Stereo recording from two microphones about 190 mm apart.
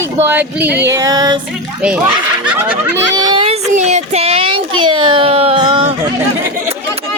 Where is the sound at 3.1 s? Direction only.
20° right (ahead or behind).